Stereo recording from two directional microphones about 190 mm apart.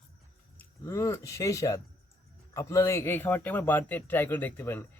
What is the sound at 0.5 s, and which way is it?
A man's voice, 15° left (ahead or behind).